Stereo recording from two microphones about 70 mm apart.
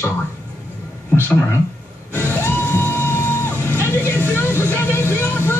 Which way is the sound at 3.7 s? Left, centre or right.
Left.